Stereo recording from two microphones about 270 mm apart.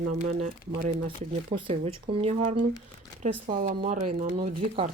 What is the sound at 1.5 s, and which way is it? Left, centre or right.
Speech, centre.